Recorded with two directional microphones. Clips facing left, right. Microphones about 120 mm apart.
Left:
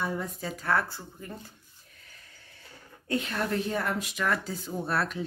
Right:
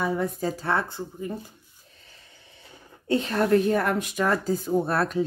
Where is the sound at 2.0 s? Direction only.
20° right (ahead or behind).